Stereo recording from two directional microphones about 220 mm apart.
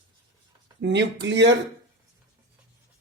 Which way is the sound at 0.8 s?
55° right (ahead or behind).